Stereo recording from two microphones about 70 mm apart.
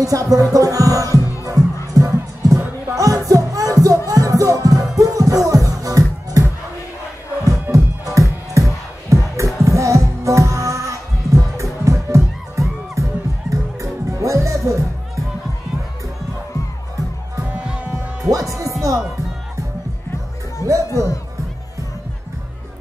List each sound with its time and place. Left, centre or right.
0.0 s music: right
7.7 s music: right
17.6 s hum: centre
18.8 s music: right
20.6 s music: right